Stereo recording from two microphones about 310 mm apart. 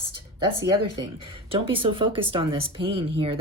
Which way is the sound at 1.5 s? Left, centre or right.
Centre.